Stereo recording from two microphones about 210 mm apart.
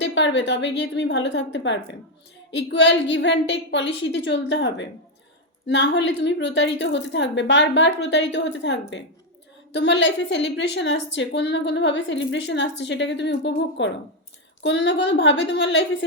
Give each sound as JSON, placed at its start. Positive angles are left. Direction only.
{"t": 0.0, "sound": "a woman's voice", "side_deg": 60}